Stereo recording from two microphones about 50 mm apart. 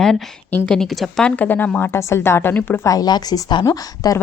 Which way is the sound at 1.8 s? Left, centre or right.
Left.